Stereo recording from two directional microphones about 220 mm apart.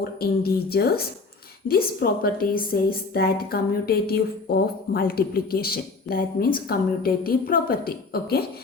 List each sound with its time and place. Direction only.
0.2 s speech: 45° left (ahead or behind)